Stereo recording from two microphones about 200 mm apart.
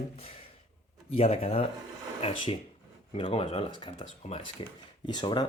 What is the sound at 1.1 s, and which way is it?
Speech, 30° left (ahead or behind).